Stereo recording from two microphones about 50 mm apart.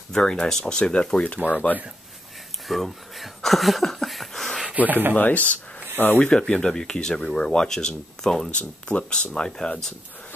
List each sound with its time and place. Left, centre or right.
0.1 s speech: centre
2.7 s speech: centre
4.6 s rub: right
5.1 s speech: left
5.9 s speech: left
6.3 s speech: centre
8.5 s speech: left